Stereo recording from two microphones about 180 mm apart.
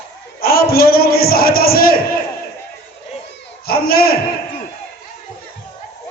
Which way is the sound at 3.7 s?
55° left (ahead or behind).